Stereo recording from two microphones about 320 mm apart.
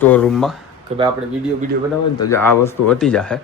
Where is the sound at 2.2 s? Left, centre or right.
Centre.